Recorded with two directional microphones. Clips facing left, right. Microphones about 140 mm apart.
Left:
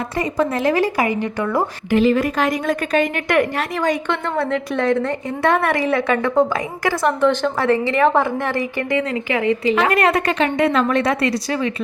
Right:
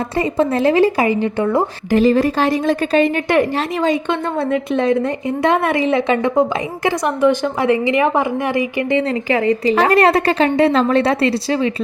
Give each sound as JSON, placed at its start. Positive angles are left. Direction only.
{"t": 0.2, "sound": "a woman's voice", "side_deg": -30}
{"t": 1.9, "sound": "a woman's voice", "side_deg": -40}
{"t": 8.9, "sound": "a woman's voice", "side_deg": -30}